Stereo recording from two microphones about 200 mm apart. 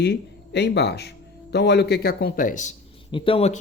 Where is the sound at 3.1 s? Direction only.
25° left (ahead or behind).